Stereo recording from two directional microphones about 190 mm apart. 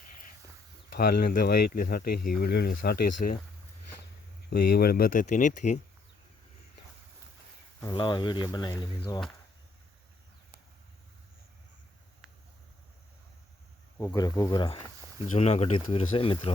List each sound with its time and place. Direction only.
0.9 s speech: 50° left (ahead or behind)
4.4 s speech: 50° left (ahead or behind)
7.8 s speech: 25° left (ahead or behind)
14.0 s speech: 20° left (ahead or behind)